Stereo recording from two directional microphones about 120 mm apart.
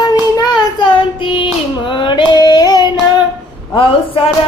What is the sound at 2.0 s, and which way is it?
Female singing, 40° left (ahead or behind).